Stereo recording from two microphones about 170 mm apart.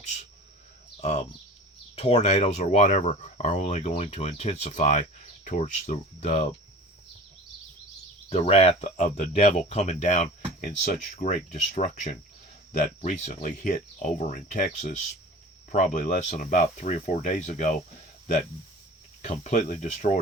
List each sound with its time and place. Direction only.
2.0 s speech: 35° left (ahead or behind)
8.3 s speech: 35° left (ahead or behind)
19.2 s speech: 40° left (ahead or behind)